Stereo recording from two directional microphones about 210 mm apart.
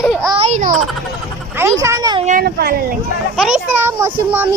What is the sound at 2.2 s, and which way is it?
Speech, 45° right (ahead or behind).